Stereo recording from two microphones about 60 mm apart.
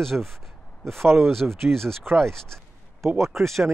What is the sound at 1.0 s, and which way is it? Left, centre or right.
Speech, right.